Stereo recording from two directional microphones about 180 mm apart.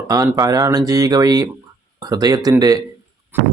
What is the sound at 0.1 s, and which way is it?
Speech, 20° right (ahead or behind).